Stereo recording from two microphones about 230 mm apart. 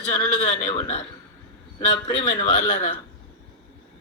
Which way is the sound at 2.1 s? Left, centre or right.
Centre.